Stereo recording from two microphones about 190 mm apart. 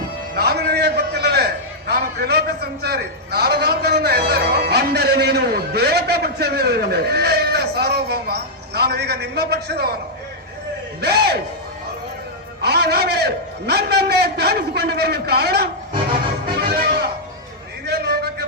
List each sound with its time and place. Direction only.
0.3 s a sound: 55° right (ahead or behind)
1.9 s a man's voice: 55° right (ahead or behind)
11.0 s a man's voice: 55° right (ahead or behind)
12.6 s a man's voice: 60° right (ahead or behind)
16.6 s music: 55° right (ahead or behind)
17.8 s a sound: 60° right (ahead or behind)